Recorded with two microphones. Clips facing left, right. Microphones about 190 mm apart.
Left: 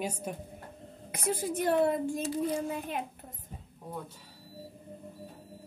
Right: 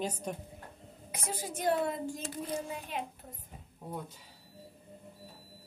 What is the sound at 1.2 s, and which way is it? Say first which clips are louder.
Speech: left 3 dB; 60° left (ahead or behind).